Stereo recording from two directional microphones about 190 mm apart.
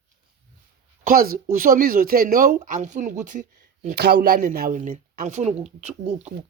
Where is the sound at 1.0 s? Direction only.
50° right (ahead or behind).